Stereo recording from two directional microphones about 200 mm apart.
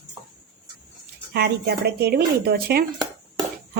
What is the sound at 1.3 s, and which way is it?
A woman's voice, 55° right (ahead or behind).